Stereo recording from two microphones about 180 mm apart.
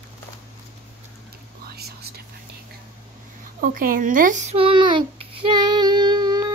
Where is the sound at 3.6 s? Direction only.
50° right (ahead or behind).